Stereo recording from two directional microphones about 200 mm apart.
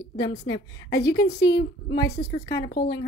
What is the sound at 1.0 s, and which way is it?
A woman's voice, 55° left (ahead or behind).